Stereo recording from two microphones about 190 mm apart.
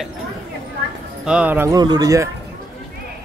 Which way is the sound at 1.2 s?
5° right (ahead or behind).